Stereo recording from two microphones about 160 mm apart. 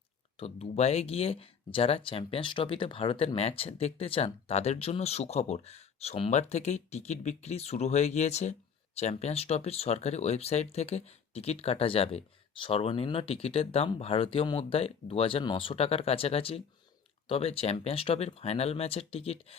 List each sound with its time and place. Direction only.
0.3 s speech: 40° left (ahead or behind)